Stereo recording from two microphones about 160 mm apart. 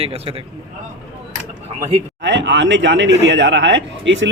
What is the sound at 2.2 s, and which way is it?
Speech, 90° right.